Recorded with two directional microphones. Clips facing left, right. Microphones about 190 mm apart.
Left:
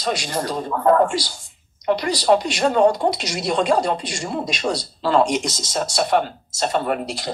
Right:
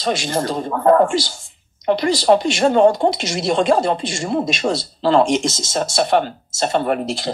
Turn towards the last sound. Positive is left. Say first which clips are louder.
# right 4 dB
turn(degrees=-25)  # may be behind; listen again after turning